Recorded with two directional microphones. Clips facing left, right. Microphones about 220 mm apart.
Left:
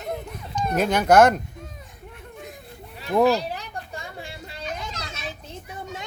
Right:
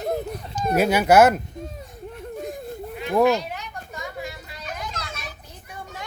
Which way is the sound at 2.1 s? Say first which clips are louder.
Right 9 dB; 40° right (ahead or behind).